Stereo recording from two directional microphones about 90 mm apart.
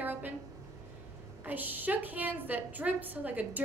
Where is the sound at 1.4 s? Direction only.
20° right (ahead or behind).